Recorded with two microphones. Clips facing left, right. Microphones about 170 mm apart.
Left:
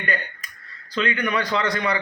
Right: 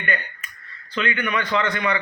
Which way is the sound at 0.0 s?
35° left (ahead or behind).